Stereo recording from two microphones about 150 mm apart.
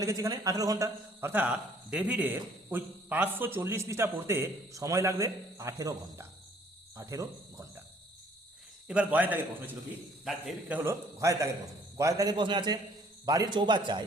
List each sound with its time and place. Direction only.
0.0 s a man's voice: 25° right (ahead or behind)
6.9 s cricket: 20° right (ahead or behind)
8.9 s a man's voice: 10° right (ahead or behind); by 14.0 s 30° right (ahead or behind)